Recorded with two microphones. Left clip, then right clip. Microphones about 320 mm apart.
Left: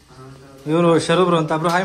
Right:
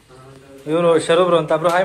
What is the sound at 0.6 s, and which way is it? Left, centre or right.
Speech, centre.